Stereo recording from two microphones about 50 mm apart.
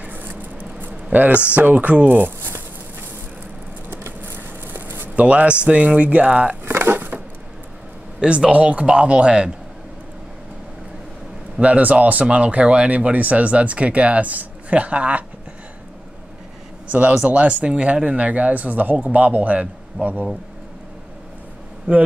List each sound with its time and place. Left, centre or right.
0.0 s a sound: right
5.2 s speech: right
6.6 s a sound: right
8.2 s speech: centre
11.6 s speech: right
16.8 s speech: right
21.9 s a man's voice: right